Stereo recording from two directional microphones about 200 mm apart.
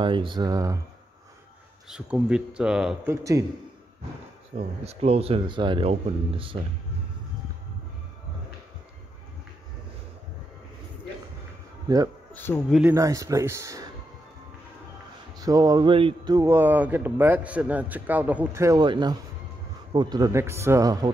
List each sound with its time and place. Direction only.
0.0 s speech: 25° right (ahead or behind)
1.9 s speech: 5° right (ahead or behind)
3.1 s speech: 15° right (ahead or behind)
4.6 s speech: 30° right (ahead or behind)
12.4 s speech: 10° left (ahead or behind)
12.8 s speech: 15° right (ahead or behind)
15.3 s speech: 20° right (ahead or behind)